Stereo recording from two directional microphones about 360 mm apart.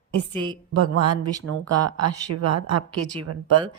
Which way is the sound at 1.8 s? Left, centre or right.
Right.